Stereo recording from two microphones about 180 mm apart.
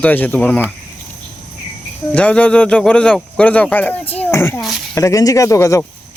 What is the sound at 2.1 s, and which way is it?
Speech, 5° left (ahead or behind).